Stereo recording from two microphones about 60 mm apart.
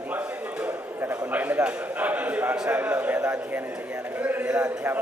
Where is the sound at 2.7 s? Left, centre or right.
Right.